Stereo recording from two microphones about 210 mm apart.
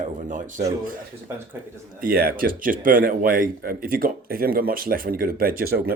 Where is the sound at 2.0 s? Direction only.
45° right (ahead or behind).